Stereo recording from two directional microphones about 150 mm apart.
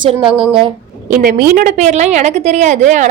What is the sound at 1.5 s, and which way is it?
A woman's voice, 55° right (ahead or behind).